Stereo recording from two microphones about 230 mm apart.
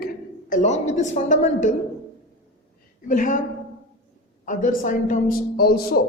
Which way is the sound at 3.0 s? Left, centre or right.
Left.